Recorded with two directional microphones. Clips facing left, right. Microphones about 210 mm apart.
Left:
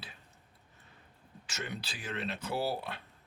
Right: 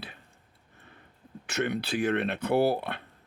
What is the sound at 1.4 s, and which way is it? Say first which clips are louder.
Speech: right 12 dB; 60° right (ahead or behind).